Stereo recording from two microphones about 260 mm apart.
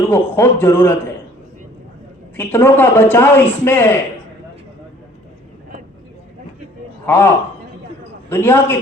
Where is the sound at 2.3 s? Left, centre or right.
Centre.